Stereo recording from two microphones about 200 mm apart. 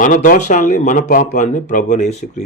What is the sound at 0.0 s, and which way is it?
Speech, 40° left (ahead or behind).